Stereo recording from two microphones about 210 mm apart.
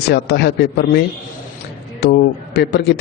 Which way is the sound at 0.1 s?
50° left (ahead or behind).